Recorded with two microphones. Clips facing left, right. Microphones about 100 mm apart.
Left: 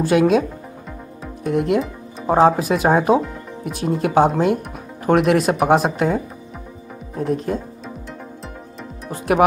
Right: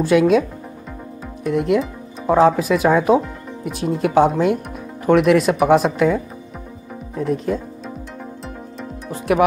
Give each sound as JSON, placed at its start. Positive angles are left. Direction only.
{"t": 0.0, "sound": "speech", "side_deg": 45}